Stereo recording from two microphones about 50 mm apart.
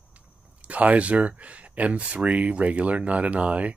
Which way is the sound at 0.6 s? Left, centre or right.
Right.